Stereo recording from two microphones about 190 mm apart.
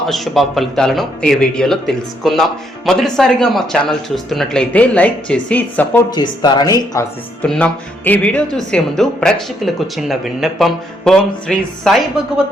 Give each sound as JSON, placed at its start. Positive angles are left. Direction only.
{"t": 0.0, "sound": "speech", "side_deg": 0}
{"t": 6.1, "sound": "speech", "side_deg": 20}
{"t": 7.4, "sound": "a man's voice", "side_deg": 5}